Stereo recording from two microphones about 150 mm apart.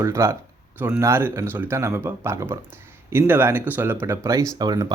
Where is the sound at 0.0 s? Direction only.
20° right (ahead or behind).